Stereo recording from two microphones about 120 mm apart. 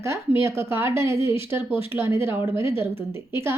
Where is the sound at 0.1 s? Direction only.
20° right (ahead or behind).